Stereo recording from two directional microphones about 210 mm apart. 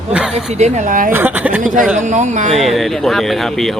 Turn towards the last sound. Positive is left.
turn(degrees=0)  # may be behind; listen again after turning